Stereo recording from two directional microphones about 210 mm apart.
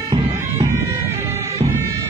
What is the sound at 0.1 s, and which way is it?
Bagpipes, 20° right (ahead or behind).